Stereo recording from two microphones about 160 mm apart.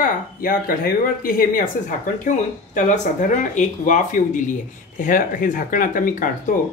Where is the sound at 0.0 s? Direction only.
65° left (ahead or behind).